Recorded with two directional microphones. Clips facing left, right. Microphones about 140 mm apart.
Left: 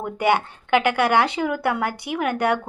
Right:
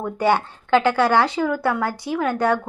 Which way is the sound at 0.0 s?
15° left (ahead or behind).